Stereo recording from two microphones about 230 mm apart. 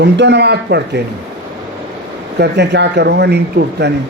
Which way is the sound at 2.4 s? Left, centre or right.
Right.